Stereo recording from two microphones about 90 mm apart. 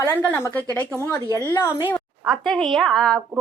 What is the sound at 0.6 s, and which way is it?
Speech, 20° left (ahead or behind).